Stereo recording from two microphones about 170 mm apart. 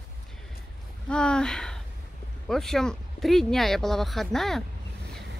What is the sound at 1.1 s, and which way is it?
Speech, 5° left (ahead or behind).